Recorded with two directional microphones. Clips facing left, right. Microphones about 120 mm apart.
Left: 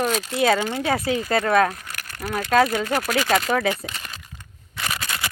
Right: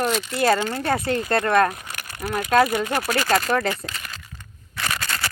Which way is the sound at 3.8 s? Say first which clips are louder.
Even; 20° left (ahead or behind).